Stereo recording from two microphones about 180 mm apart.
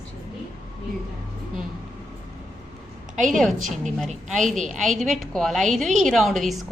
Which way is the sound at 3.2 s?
Centre (ahead or behind).